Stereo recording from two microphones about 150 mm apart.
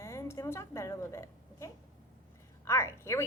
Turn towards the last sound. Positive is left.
turn(degrees=20)  # may be behind; listen again after turning